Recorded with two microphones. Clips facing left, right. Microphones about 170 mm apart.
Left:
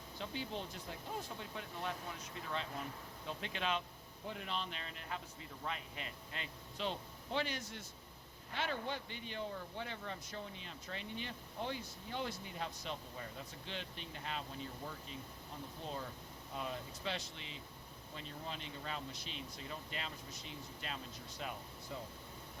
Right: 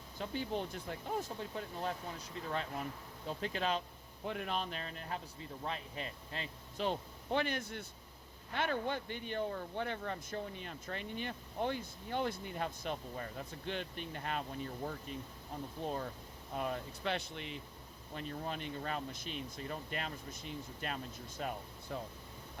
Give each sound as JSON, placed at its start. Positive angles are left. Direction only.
{"t": 0.2, "sound": "speech", "side_deg": -50}
{"t": 1.4, "sound": "a man's voice", "side_deg": -35}
{"t": 4.3, "sound": "a man's voice", "side_deg": -55}
{"t": 7.3, "sound": "speech", "side_deg": -55}
{"t": 16.6, "sound": "speech", "side_deg": -55}
{"t": 21.9, "sound": "speech", "side_deg": -60}